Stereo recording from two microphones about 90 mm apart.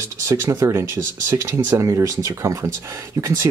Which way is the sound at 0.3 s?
35° right (ahead or behind).